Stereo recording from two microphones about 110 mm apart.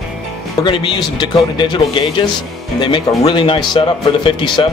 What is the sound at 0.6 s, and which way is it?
Speech, 45° left (ahead or behind).